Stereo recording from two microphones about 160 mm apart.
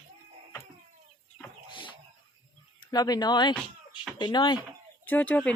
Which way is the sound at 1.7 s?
30° left (ahead or behind).